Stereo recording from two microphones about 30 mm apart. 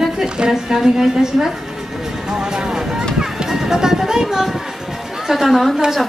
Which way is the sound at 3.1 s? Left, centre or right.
Centre.